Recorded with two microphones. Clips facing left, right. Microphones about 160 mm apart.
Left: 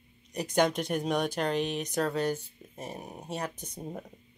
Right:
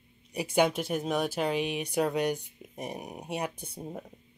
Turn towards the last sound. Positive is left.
turn(degrees=-5)  # may be behind; listen again after turning